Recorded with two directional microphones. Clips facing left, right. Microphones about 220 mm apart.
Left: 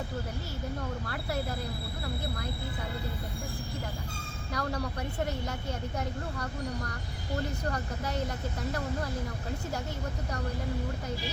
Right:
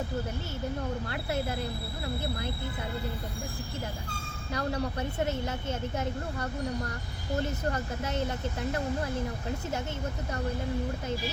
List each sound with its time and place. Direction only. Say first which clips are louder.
4.5 s a woman's voice: right 3 dB; 25° right (ahead or behind)
7.7 s a woman's voice: right 2 dB; 25° right (ahead or behind)